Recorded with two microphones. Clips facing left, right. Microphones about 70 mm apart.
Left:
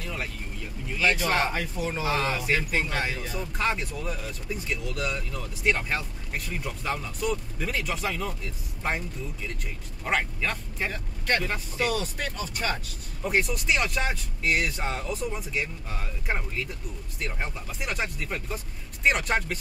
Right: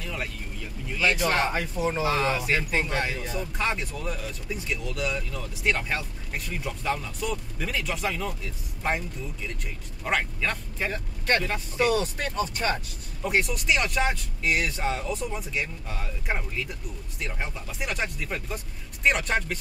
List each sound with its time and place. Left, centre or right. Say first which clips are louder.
1.0 s speech: right 1 dB; centre
1.5 s speech: right 3 dB; right
2.0 s speech: left 1 dB; centre
10.0 s speech: even; centre
11.9 s speech: right 4 dB; right
13.2 s speech: even; centre